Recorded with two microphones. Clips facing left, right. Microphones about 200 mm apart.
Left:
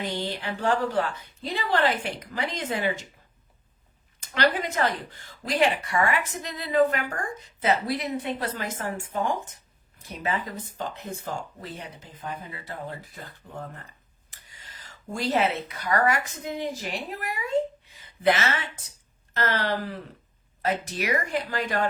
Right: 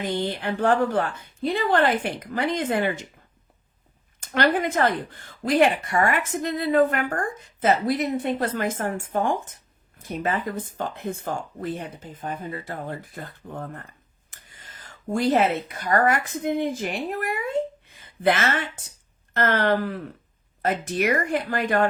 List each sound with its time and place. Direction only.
0.0 s speech: 50° right (ahead or behind)
4.2 s speech: 50° right (ahead or behind)